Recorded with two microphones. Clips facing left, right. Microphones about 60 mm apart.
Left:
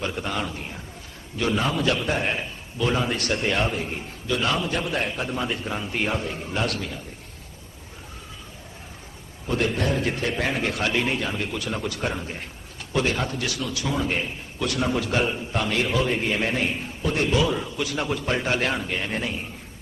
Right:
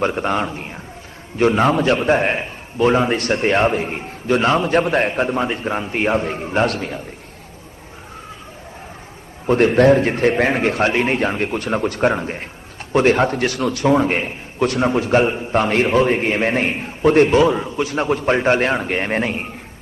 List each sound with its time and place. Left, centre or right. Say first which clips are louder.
0.0 s a man's voice: right 9 dB; right
9.5 s a man's voice: right 12 dB; right